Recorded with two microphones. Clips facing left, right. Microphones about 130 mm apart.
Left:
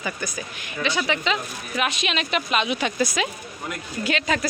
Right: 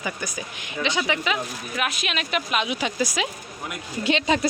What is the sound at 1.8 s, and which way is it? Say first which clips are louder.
A woman's voice: left 3 dB; centre (ahead or behind).